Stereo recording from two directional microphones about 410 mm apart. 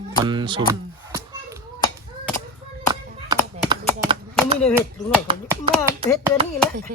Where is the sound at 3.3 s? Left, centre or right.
Centre.